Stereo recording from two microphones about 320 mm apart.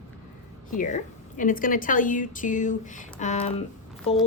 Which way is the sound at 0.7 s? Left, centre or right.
Left.